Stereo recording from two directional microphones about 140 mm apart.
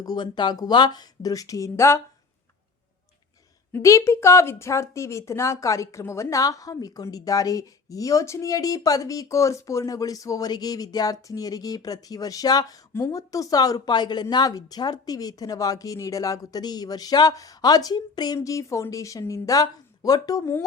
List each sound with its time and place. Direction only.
0.0 s a woman's voice: 30° left (ahead or behind)
3.7 s a woman's voice: 20° left (ahead or behind)